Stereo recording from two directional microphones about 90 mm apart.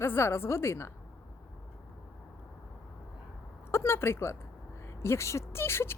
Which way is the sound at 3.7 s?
30° left (ahead or behind).